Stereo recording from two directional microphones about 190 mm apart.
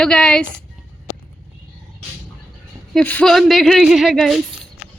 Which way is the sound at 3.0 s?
5° left (ahead or behind).